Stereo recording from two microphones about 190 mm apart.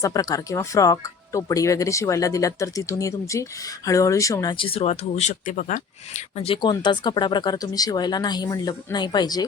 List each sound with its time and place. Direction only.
0.0 s speech: 20° left (ahead or behind); by 5.8 s 45° left (ahead or behind)
6.3 s speech: 30° left (ahead or behind)